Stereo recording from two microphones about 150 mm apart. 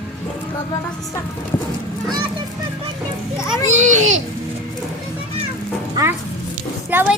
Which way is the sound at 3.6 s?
55° right (ahead or behind).